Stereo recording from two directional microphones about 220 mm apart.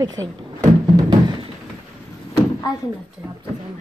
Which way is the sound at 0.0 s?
15° right (ahead or behind).